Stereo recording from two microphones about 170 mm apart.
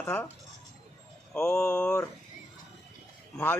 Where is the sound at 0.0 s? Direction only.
10° left (ahead or behind).